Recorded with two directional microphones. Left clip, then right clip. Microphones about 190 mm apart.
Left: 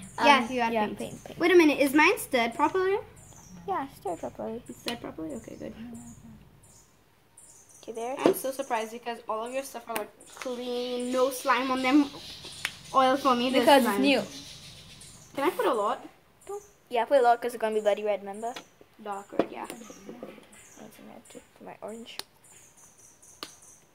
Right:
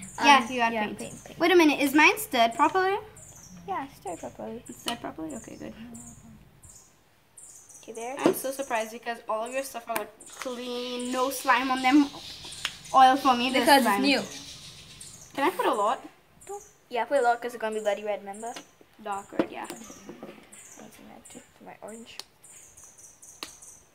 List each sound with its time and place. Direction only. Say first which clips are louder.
0.3 s a child's voice: right 3 dB; 10° right (ahead or behind)
3.6 s a woman's voice: left 2 dB; 30° left (ahead or behind)
4.8 s a woman's voice: right 2 dB; 15° right (ahead or behind)
7.8 s speech: left 2 dB; 35° left (ahead or behind)
8.2 s a woman's voice: even; 10° right (ahead or behind)
15.3 s a woman's voice: right 1 dB; 15° right (ahead or behind)
16.9 s speech: left 2 dB; 35° left (ahead or behind)
19.0 s a woman's voice: even; 15° right (ahead or behind)
21.3 s a sound: left 2 dB; 25° left (ahead or behind)